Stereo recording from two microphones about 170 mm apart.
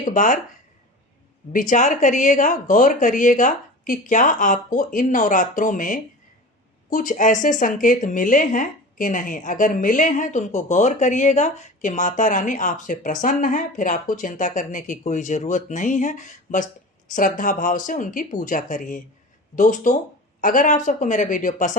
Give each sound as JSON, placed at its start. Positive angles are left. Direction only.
{"t": 0.0, "sound": "speech", "side_deg": 45}
{"t": 1.5, "sound": "speech", "side_deg": 50}